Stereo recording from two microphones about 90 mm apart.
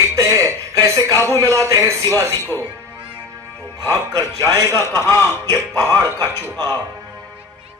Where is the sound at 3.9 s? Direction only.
40° right (ahead or behind).